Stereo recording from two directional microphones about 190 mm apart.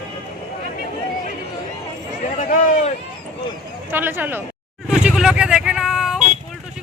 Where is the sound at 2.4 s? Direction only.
45° left (ahead or behind).